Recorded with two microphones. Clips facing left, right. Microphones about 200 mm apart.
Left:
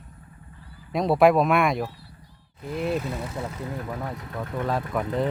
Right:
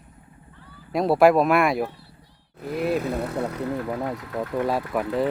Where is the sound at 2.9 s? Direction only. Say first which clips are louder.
Right 4 dB; 60° right (ahead or behind).